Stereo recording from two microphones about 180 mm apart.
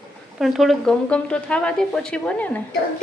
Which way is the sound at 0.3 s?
Centre (ahead or behind).